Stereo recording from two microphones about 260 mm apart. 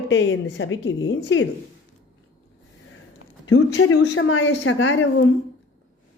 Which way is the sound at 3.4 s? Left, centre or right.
Left.